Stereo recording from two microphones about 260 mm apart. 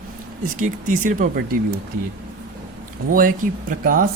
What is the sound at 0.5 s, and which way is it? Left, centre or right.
Speech, right.